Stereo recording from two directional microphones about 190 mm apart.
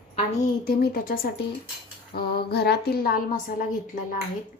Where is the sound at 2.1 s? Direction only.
55° left (ahead or behind).